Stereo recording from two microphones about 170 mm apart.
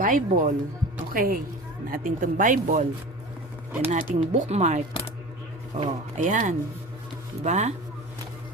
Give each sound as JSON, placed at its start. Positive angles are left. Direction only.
{"t": 0.0, "sound": "a woman's voice", "side_deg": -50}
{"t": 3.7, "sound": "speech", "side_deg": -15}
{"t": 4.1, "sound": "speech", "side_deg": -45}